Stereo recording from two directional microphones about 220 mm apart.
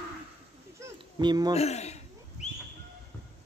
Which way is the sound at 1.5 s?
30° left (ahead or behind).